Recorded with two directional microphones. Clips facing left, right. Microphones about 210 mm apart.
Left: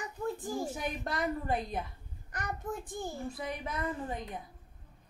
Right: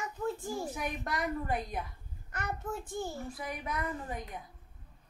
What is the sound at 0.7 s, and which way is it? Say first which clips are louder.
A woman's voice: left 1 dB; 30° left (ahead or behind).